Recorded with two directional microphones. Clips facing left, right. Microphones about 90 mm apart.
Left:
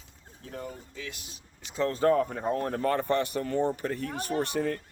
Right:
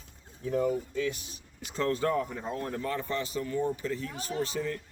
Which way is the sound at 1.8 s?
35° left (ahead or behind).